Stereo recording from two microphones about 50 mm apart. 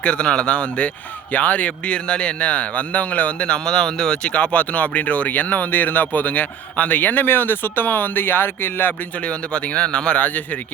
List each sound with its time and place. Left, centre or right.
0.0 s speech: left
9.2 s speech: left